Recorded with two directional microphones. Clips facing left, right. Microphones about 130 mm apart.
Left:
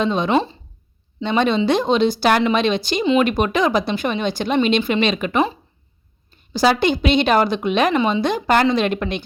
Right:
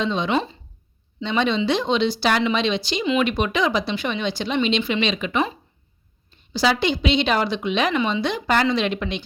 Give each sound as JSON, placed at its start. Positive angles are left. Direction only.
{"t": 0.0, "sound": "a woman's voice", "side_deg": 50}
{"t": 0.3, "sound": "speech", "side_deg": 30}
{"t": 1.2, "sound": "a woman's voice", "side_deg": 50}
{"t": 3.0, "sound": "speech", "side_deg": 30}
{"t": 3.2, "sound": "a woman's voice", "side_deg": 45}